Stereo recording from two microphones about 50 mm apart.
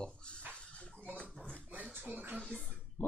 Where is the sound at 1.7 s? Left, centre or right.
Right.